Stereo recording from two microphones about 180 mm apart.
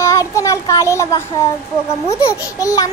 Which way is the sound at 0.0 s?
15° left (ahead or behind).